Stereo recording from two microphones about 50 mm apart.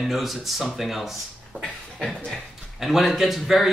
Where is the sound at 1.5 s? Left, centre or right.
Left.